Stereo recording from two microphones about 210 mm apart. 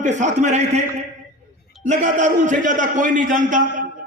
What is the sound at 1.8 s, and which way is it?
A man's voice, 35° right (ahead or behind).